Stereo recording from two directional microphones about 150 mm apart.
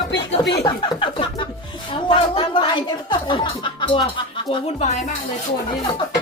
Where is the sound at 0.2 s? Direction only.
30° left (ahead or behind).